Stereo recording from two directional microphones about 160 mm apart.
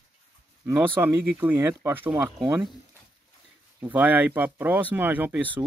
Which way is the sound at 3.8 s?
10° right (ahead or behind).